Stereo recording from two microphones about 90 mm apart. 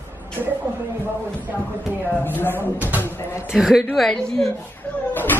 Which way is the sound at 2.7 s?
20° right (ahead or behind).